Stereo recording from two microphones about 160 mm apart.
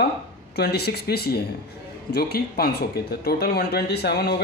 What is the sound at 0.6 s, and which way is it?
Speech, 90° left.